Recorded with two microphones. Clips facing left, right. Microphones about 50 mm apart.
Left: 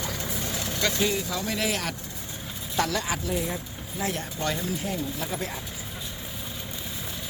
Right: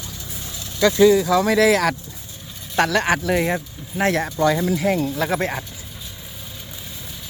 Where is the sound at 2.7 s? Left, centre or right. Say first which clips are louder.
Right 9 dB; right.